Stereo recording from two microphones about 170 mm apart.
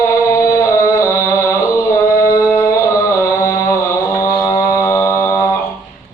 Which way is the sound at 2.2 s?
20° left (ahead or behind).